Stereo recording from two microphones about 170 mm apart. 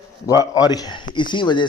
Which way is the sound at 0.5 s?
25° left (ahead or behind).